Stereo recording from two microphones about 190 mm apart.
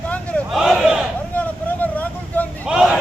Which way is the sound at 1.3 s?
10° left (ahead or behind).